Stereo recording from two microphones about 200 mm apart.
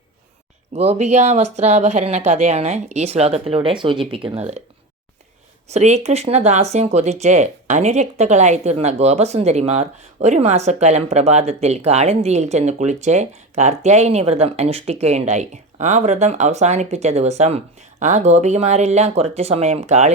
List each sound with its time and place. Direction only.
0.7 s speech: 30° right (ahead or behind)
5.7 s speech: 35° right (ahead or behind)